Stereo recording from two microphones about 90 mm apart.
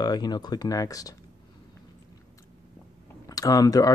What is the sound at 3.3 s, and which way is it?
Speech, 45° left (ahead or behind).